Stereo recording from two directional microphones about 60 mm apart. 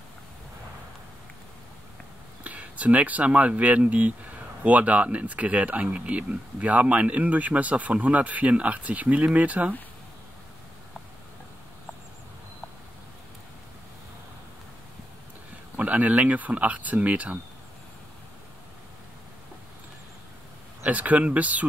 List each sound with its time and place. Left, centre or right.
2.4 s speech: right
15.7 s speech: right
20.9 s speech: right